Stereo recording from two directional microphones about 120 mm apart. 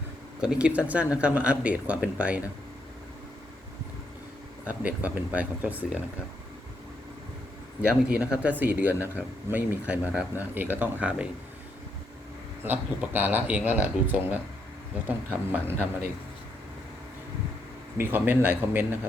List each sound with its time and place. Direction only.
0.4 s speech: 10° right (ahead or behind)
4.6 s speech: 10° right (ahead or behind)
7.8 s speech: 10° right (ahead or behind)
12.6 s speech: 15° right (ahead or behind)
17.9 s speech: 15° right (ahead or behind)